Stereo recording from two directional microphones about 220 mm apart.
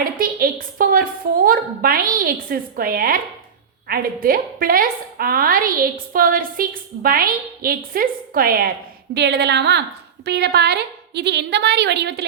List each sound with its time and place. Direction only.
0.0 s a woman's voice: 40° right (ahead or behind)